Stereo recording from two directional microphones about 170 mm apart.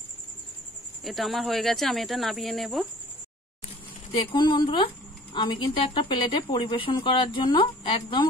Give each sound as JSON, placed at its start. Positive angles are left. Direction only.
{"t": 1.0, "sound": "speech", "side_deg": 0}
{"t": 4.1, "sound": "speech", "side_deg": 30}